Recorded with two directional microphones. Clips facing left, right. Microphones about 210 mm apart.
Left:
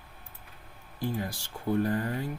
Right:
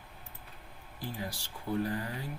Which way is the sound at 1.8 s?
50° left (ahead or behind).